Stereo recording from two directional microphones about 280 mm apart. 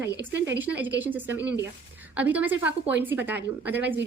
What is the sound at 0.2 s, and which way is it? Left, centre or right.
A woman's voice, centre.